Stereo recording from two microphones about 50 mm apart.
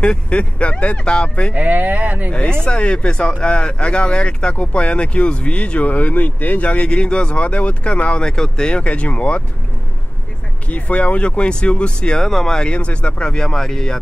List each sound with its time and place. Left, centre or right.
0.0 s speech: left
1.5 s speech: right
2.3 s speech: centre
10.7 s speech: left; by 13.9 s centre